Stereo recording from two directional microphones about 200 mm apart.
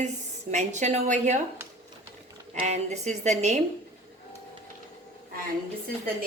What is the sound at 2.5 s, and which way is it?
A woman's voice, 35° right (ahead or behind).